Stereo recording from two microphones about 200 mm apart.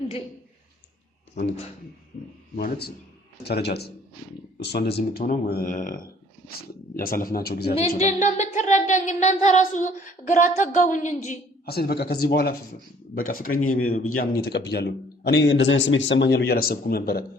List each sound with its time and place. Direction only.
2.6 s a man's voice: 50° left (ahead or behind)
7.8 s a woman's voice: 35° left (ahead or behind)
11.6 s a man's voice: 50° left (ahead or behind)